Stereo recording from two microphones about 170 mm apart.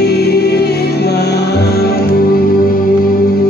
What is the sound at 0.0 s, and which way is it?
Music, 70° left (ahead or behind).